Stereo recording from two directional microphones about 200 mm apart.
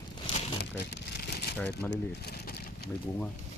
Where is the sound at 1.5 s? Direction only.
5° left (ahead or behind).